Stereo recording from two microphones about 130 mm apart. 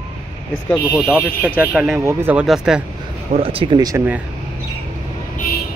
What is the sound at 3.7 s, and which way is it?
Speech, 30° right (ahead or behind).